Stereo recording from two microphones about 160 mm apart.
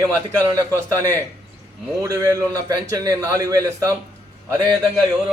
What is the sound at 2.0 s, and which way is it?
A man's voice, 20° right (ahead or behind).